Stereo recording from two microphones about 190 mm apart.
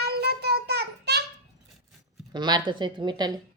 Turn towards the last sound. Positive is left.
turn(degrees=-25)  # may be behind; listen again after turning